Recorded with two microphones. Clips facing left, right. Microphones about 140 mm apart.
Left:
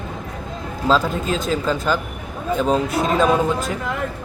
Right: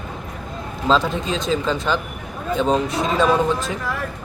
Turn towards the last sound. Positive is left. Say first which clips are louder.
# left 2 dB
turn(degrees=20)  # may be behind; listen again after turning